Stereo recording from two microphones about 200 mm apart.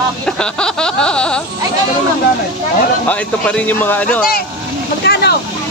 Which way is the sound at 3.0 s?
5° left (ahead or behind).